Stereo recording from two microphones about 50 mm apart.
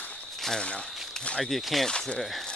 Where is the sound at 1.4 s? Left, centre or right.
Centre.